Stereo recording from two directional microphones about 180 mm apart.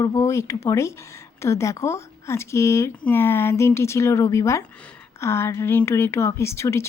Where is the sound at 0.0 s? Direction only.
20° left (ahead or behind).